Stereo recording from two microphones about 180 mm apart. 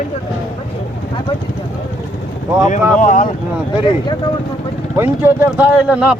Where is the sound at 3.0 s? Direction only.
45° left (ahead or behind).